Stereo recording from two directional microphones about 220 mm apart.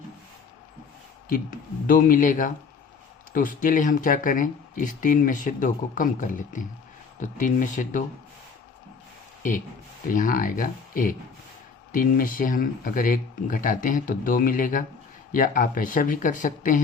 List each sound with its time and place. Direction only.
1.3 s speech: 40° left (ahead or behind)
10.1 s speech: 40° left (ahead or behind)